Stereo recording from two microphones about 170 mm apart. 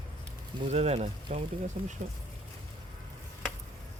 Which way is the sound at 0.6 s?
40° right (ahead or behind).